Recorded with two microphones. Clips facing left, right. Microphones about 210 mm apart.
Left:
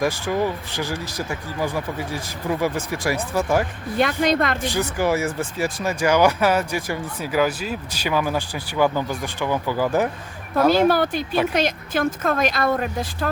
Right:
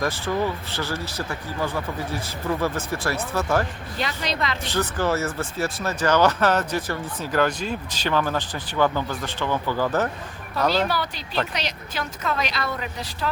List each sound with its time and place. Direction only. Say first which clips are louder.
0.0 s speech: left 3 dB; 10° left (ahead or behind)
3.9 s speech: left 9 dB; 55° left (ahead or behind)
4.6 s speech: left 2 dB; 15° left (ahead or behind)
10.8 s speech: left 9 dB; 50° left (ahead or behind)